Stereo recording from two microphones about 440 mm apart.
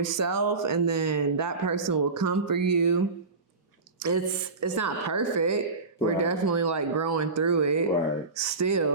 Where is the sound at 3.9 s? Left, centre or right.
Right.